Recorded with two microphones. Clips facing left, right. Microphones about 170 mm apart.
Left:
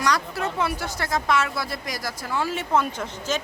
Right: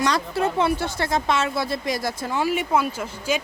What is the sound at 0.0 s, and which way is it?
A woman's voice, 25° right (ahead or behind).